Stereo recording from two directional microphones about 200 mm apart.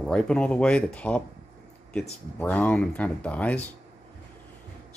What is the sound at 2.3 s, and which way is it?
Speech, 10° left (ahead or behind).